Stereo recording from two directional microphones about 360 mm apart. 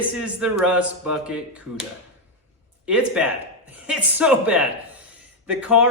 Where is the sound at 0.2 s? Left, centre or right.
Centre.